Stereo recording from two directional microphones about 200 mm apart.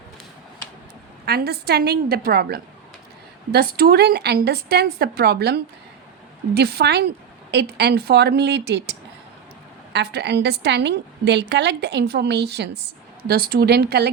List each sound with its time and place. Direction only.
1.2 s a woman's voice: 55° right (ahead or behind)